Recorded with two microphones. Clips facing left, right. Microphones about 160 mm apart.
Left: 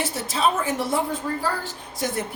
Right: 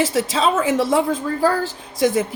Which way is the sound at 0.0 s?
90° right.